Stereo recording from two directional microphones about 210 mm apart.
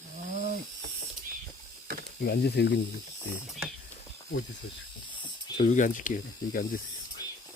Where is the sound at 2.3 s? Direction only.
50° left (ahead or behind).